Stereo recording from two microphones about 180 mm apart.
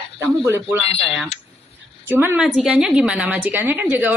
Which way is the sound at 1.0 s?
Centre (ahead or behind).